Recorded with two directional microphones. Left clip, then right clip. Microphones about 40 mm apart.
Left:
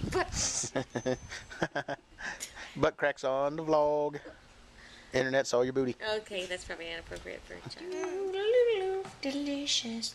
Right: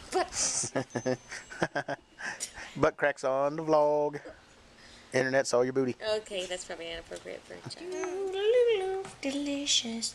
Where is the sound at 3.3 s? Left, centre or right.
Right.